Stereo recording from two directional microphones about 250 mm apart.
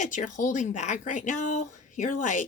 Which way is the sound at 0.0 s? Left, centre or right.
Left.